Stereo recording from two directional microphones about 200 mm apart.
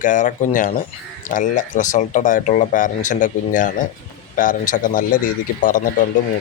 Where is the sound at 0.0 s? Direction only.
40° left (ahead or behind).